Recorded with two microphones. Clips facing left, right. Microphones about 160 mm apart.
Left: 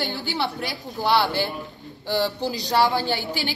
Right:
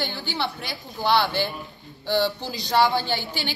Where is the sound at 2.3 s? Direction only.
35° left (ahead or behind).